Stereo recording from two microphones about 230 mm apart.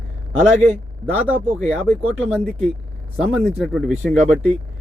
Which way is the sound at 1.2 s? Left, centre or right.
Centre.